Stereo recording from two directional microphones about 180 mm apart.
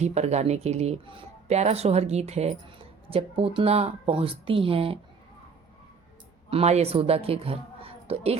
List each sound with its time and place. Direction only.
0.0 s speech: 40° right (ahead or behind)
6.5 s a woman's voice: 35° right (ahead or behind)